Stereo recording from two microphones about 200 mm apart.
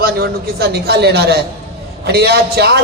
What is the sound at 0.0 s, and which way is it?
A man's voice, 55° right (ahead or behind).